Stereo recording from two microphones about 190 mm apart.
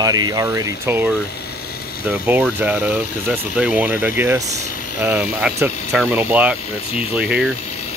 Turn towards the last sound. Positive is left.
turn(degrees=-5)  # may be behind; listen again after turning